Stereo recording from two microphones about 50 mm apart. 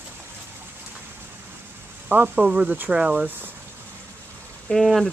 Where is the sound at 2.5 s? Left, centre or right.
Right.